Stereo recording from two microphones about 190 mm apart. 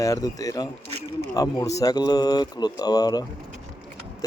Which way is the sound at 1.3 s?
20° left (ahead or behind).